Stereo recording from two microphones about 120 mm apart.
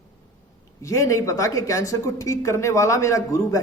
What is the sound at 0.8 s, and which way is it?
A man's voice, 25° left (ahead or behind).